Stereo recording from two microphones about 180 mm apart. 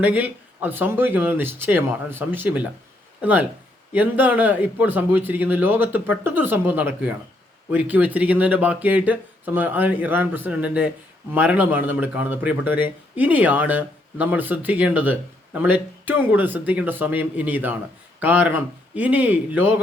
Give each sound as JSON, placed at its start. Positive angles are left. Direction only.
{"t": 0.0, "sound": "speech", "side_deg": -10}